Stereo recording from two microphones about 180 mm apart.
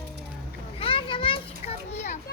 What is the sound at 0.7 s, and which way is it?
Children playing, 30° left (ahead or behind).